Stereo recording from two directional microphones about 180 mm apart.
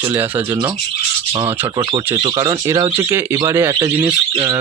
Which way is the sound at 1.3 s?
25° right (ahead or behind).